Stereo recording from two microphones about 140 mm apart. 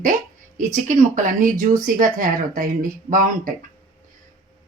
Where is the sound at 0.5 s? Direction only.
60° right (ahead or behind).